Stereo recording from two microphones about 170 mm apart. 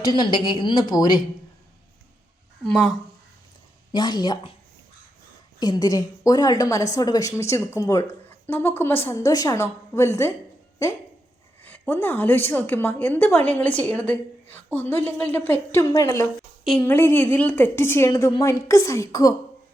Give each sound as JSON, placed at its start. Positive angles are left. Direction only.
{"t": 0.2, "sound": "a woman's voice", "side_deg": 25}
{"t": 2.6, "sound": "speech", "side_deg": 5}
{"t": 3.9, "sound": "a woman's voice", "side_deg": 25}
{"t": 5.5, "sound": "a woman's voice", "side_deg": 25}
{"t": 11.6, "sound": "a woman's voice", "side_deg": 10}
{"t": 16.6, "sound": "a woman's voice", "side_deg": 5}